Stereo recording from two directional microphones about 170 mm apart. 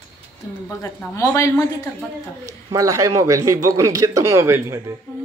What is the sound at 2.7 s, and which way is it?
A man's voice, 20° right (ahead or behind).